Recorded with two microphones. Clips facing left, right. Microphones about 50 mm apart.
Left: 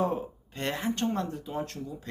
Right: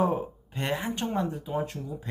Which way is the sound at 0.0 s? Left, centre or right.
Centre.